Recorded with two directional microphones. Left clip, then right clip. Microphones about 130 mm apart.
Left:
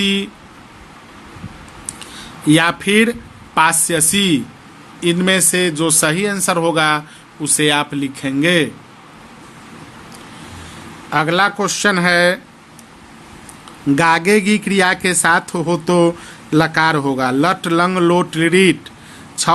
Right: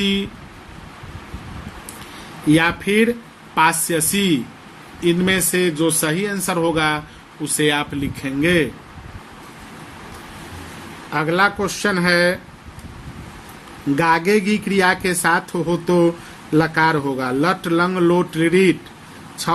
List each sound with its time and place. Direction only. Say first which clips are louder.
0.0 s speech: left 3 dB; 50° left (ahead or behind)
2.5 s speech: left 3 dB; 55° left (ahead or behind)
11.1 s speech: left 3 dB; 50° left (ahead or behind)
13.9 s speech: left 3 dB; 45° left (ahead or behind)